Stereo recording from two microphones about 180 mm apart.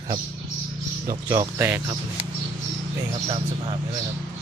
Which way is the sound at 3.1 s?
30° right (ahead or behind).